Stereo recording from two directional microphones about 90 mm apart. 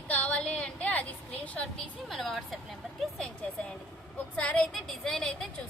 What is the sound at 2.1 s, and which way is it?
Speech, centre (ahead or behind).